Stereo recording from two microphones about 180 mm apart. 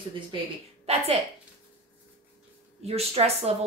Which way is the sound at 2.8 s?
35° right (ahead or behind).